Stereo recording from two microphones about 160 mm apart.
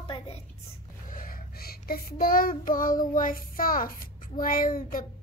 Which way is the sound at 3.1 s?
60° left (ahead or behind).